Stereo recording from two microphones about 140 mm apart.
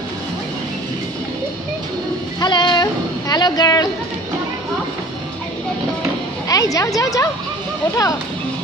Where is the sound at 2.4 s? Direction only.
35° left (ahead or behind).